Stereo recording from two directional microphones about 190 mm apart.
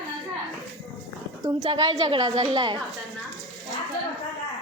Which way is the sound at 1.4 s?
20° right (ahead or behind).